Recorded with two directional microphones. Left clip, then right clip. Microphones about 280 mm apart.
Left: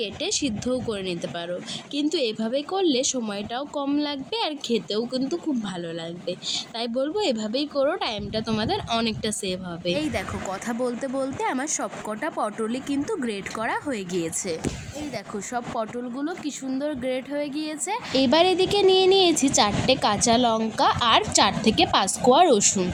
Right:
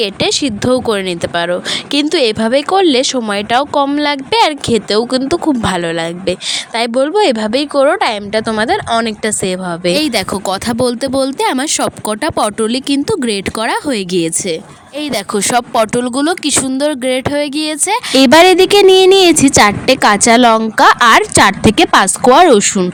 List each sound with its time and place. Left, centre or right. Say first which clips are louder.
0.0 s speech: right 13 dB; right